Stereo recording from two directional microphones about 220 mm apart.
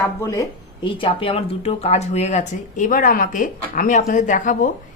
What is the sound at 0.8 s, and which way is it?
Speech, 25° left (ahead or behind).